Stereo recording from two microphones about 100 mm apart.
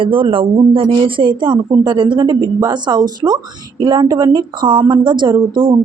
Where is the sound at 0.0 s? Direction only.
60° right (ahead or behind).